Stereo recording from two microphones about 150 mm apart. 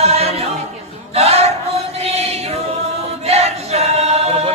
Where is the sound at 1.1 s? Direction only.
45° right (ahead or behind).